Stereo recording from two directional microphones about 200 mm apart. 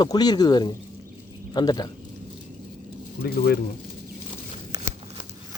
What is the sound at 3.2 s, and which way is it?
Speech, 50° left (ahead or behind).